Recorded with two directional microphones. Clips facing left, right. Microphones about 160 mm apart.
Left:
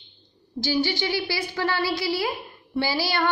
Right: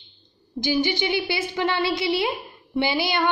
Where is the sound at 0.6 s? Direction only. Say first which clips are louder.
Right 2 dB; 20° right (ahead or behind).